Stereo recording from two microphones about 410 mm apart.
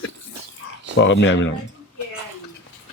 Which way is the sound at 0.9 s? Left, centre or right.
Left.